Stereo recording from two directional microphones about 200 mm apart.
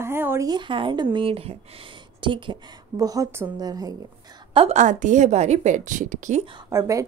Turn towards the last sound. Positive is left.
turn(degrees=-15)  # may be behind; listen again after turning